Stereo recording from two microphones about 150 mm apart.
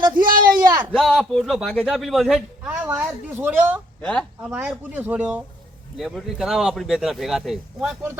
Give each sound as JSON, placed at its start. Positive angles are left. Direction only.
{"t": 0.2, "sound": "a sound", "side_deg": -70}
{"t": 0.7, "sound": "a sound", "side_deg": -15}
{"t": 0.9, "sound": "speech", "side_deg": 0}
{"t": 2.6, "sound": "speech", "side_deg": -15}
{"t": 4.0, "sound": "speech", "side_deg": 5}
{"t": 4.4, "sound": "speech", "side_deg": -10}